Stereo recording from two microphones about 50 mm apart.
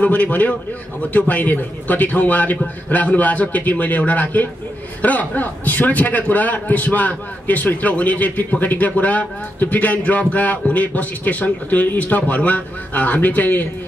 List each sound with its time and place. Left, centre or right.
0.0 s a man's voice: left